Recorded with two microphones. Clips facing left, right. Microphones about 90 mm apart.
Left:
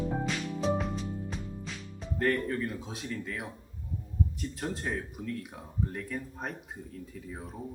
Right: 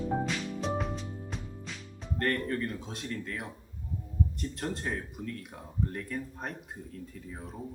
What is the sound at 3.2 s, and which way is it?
Speech, centre (ahead or behind).